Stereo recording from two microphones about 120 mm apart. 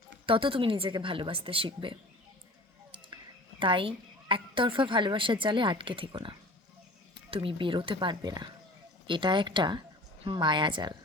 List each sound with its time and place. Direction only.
0.3 s a woman's voice: 50° right (ahead or behind)
3.6 s a woman's voice: 45° right (ahead or behind)